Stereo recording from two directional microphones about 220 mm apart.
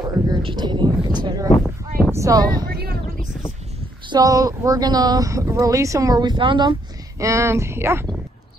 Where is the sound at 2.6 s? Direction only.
45° right (ahead or behind).